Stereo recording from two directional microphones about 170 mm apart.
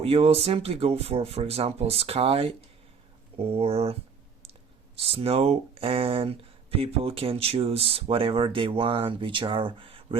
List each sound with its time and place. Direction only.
0.0 s speech: 35° right (ahead or behind)
4.9 s speech: 35° right (ahead or behind)